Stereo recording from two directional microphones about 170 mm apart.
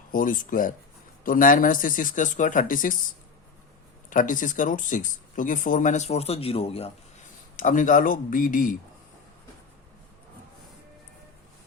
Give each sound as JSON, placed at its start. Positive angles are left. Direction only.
{"t": 0.1, "sound": "speech", "side_deg": 55}
{"t": 4.1, "sound": "speech", "side_deg": 50}
{"t": 7.5, "sound": "speech", "side_deg": 50}